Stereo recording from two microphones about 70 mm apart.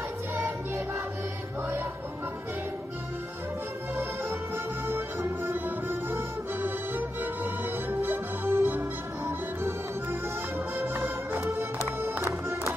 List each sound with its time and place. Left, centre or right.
4.8 s music: right
12.0 s music: right